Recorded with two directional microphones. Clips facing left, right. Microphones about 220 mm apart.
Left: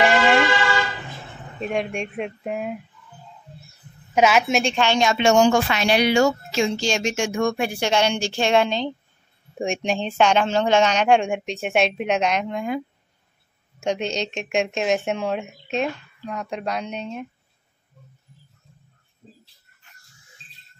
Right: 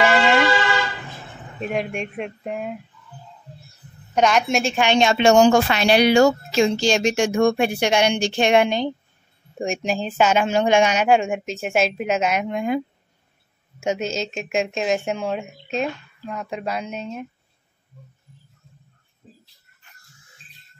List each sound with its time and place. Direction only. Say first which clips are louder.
0.0 s vehicle: even; centre (ahead or behind)
1.6 s speech: even; centre (ahead or behind)
4.1 s speech: left 1 dB; 5° left (ahead or behind)
4.7 s a woman's voice: right 2 dB; 20° right (ahead or behind)
9.6 s speech: even; centre (ahead or behind); by 12.8 s 20° right (ahead or behind)
13.7 s speech: right 1 dB; 5° right (ahead or behind)